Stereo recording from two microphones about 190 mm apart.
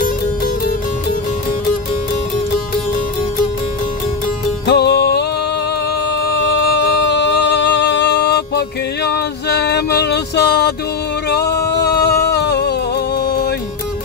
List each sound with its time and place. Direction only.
4.6 s music: 60° left (ahead or behind)
7.1 s music: 65° left (ahead or behind)
11.2 s a sound: 60° left (ahead or behind)